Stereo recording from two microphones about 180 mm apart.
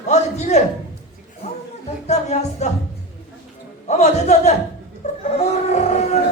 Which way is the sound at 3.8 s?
40° left (ahead or behind).